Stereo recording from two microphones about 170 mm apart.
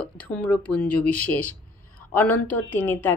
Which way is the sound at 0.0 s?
5° left (ahead or behind).